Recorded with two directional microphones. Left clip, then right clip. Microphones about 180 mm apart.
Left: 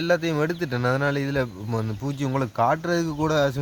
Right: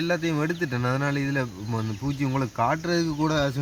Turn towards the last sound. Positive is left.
turn(degrees=45)  # may be behind; listen again after turning